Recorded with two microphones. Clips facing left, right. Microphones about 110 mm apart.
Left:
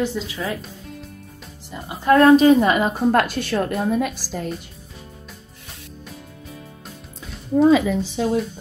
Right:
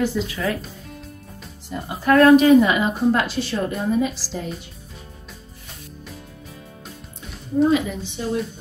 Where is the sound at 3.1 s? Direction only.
50° left (ahead or behind).